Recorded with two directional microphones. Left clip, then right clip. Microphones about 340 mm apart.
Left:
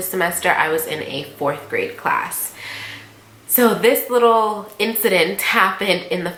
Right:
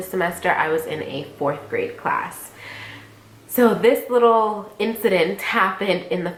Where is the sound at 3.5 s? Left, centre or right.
Centre.